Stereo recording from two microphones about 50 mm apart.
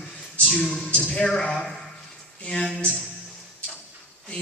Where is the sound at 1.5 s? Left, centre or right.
Centre.